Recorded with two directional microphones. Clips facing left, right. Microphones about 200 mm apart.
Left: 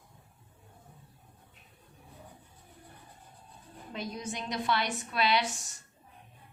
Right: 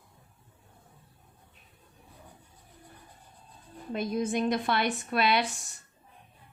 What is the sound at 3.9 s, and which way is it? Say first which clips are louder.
A woman's voice: right 9 dB; 55° right (ahead or behind).